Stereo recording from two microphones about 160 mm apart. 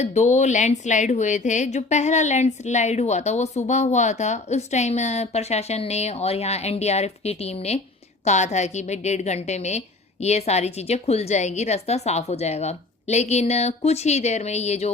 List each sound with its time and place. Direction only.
0.0 s a woman's voice: 45° left (ahead or behind)